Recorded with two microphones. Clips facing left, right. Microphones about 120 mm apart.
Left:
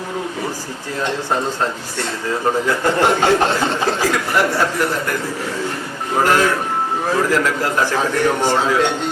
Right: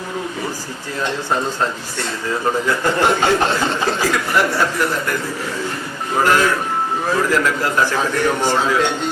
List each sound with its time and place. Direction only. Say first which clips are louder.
1.0 s a man's voice: even; 30° left (ahead or behind)